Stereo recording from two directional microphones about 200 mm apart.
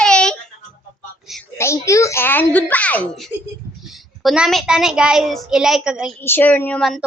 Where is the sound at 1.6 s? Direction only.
15° left (ahead or behind); by 6.1 s 5° right (ahead or behind).